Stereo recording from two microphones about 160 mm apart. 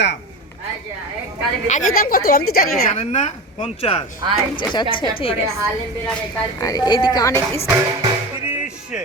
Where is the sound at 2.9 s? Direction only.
45° left (ahead or behind).